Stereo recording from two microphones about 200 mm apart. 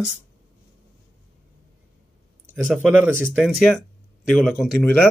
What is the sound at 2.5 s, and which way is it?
Speech, centre (ahead or behind).